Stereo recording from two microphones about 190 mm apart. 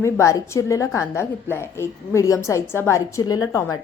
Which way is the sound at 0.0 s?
15° left (ahead or behind).